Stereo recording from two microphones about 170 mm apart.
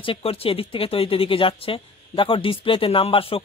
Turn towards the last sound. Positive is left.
turn(degrees=35)  # may be behind; listen again after turning